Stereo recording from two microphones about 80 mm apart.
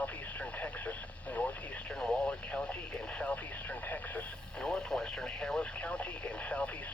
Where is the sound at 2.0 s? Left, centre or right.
Centre.